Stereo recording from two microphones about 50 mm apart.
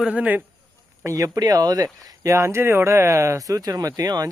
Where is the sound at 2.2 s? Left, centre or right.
Right.